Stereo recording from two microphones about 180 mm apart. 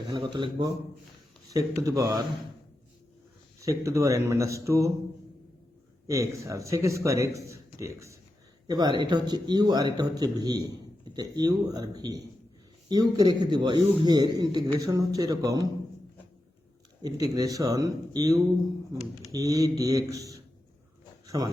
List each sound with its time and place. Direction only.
0.1 s a man's voice: 25° right (ahead or behind)
3.6 s speech: 20° right (ahead or behind)
6.1 s a man's voice: 15° right (ahead or behind)
17.0 s a man's voice: 20° right (ahead or behind)
21.2 s a sound: 20° right (ahead or behind)